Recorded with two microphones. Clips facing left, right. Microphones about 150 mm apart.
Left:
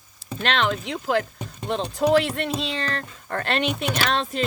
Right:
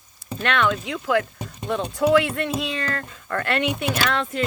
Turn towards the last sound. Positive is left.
turn(degrees=25)  # may be behind; listen again after turning